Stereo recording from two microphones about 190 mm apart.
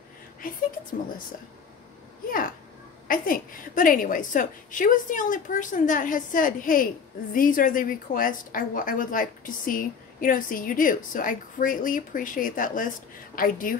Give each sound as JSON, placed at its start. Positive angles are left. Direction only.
{"t": 3.1, "sound": "a woman's voice", "side_deg": 45}